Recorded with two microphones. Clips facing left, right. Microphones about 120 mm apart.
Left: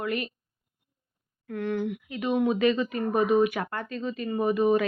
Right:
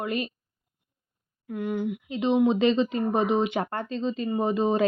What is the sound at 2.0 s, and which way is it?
Speech, 25° right (ahead or behind).